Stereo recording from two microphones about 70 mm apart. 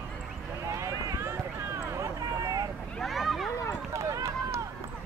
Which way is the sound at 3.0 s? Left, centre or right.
Centre.